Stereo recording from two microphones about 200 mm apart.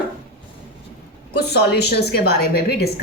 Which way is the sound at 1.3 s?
55° left (ahead or behind).